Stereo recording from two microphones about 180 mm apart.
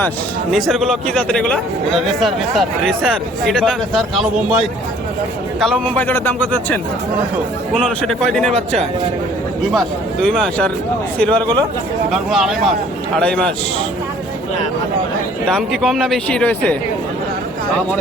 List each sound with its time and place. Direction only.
0.5 s speech: centre (ahead or behind)
5.8 s a man's voice: 10° left (ahead or behind)
7.8 s speech: centre (ahead or behind)
9.7 s a man's voice: centre (ahead or behind)
15.4 s speech: centre (ahead or behind)